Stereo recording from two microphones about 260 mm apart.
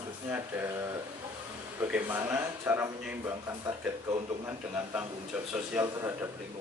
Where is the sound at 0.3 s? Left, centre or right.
Centre.